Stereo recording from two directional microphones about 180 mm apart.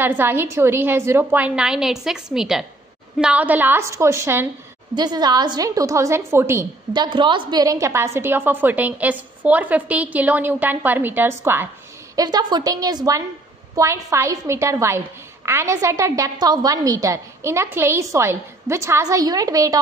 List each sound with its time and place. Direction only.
0.0 s a woman's voice: 10° right (ahead or behind)